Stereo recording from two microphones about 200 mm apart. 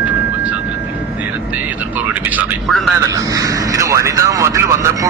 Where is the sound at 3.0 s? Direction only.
15° right (ahead or behind).